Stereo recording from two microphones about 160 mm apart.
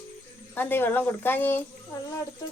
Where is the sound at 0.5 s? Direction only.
10° left (ahead or behind).